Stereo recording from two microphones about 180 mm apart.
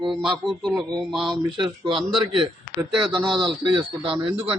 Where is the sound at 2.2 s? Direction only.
25° right (ahead or behind).